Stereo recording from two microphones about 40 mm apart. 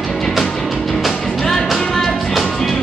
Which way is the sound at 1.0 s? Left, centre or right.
Centre.